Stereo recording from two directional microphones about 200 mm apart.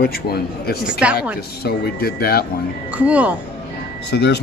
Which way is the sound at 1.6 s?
55° left (ahead or behind).